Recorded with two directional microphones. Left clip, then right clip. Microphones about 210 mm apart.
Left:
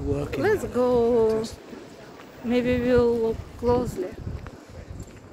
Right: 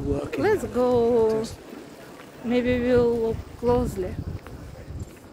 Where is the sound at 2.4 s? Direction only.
10° left (ahead or behind).